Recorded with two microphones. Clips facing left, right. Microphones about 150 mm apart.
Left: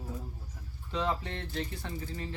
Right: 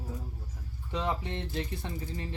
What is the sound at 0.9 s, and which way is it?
Speech, 20° right (ahead or behind).